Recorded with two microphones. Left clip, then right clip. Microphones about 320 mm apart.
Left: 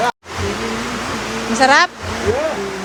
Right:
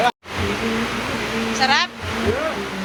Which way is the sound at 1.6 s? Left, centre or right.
Left.